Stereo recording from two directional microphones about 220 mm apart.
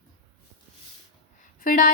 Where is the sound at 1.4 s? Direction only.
40° left (ahead or behind).